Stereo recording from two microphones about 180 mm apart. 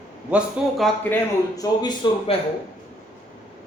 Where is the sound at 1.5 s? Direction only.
20° left (ahead or behind).